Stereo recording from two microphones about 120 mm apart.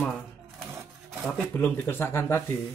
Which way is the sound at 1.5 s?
15° left (ahead or behind).